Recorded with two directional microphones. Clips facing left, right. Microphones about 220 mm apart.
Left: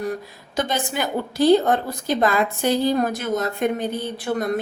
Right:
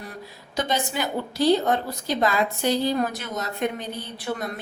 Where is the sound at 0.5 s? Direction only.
50° left (ahead or behind).